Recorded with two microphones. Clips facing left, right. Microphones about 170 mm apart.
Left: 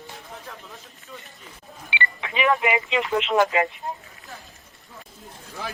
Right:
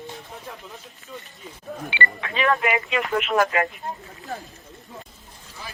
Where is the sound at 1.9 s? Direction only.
20° left (ahead or behind).